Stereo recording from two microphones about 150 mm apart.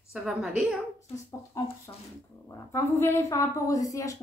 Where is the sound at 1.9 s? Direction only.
25° left (ahead or behind).